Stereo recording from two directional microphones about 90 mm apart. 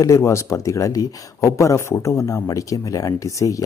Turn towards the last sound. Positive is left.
turn(degrees=35)  # may be behind; listen again after turning